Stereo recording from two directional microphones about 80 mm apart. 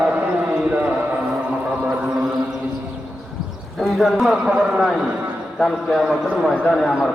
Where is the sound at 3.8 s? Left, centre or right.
Centre.